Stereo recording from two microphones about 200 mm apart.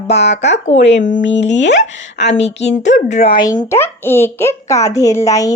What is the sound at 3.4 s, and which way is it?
A child's voice, 20° left (ahead or behind).